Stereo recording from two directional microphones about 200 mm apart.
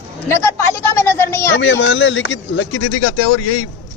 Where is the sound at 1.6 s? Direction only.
65° left (ahead or behind); by 2.8 s 80° left.